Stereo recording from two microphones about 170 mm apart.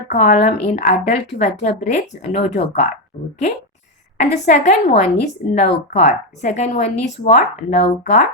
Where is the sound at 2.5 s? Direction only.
40° left (ahead or behind).